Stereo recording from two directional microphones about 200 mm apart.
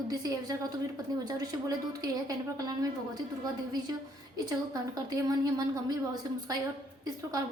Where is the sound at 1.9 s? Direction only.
20° right (ahead or behind).